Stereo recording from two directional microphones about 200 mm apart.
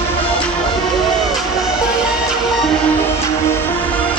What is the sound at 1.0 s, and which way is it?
Music, centre (ahead or behind).